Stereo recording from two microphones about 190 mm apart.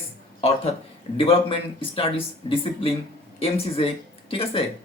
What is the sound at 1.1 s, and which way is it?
Speech, 30° left (ahead or behind).